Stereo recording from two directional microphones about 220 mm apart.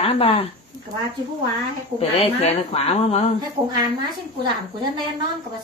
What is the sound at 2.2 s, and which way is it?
Speech, 25° left (ahead or behind).